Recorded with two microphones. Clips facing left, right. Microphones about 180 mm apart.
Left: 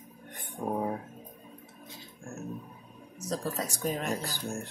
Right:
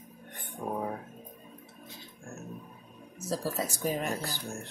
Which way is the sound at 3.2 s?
5° right (ahead or behind).